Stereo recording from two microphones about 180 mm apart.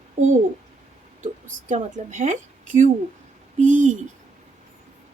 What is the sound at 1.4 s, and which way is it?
A woman's voice, 45° right (ahead or behind).